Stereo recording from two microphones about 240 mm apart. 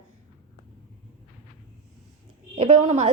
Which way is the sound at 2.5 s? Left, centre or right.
Right.